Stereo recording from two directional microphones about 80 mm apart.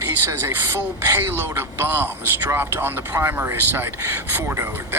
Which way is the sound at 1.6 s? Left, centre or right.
Right.